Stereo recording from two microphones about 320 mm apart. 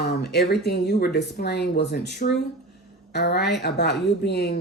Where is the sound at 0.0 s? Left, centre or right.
Left.